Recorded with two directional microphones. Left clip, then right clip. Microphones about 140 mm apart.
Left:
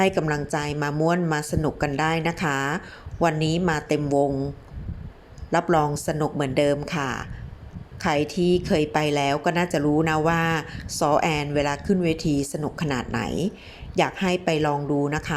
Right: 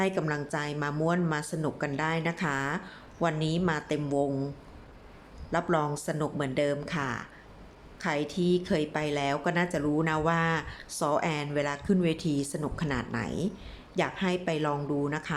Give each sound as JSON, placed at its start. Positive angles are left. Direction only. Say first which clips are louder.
{"t": 0.0, "sound": "a woman's voice", "louder": "left 7 dB", "side_deg": 30}
{"t": 5.5, "sound": "a woman's voice", "louder": "left 7 dB", "side_deg": 30}